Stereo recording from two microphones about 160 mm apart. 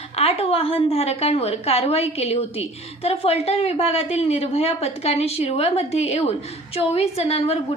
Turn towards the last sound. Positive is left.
turn(degrees=40)  # may be behind; listen again after turning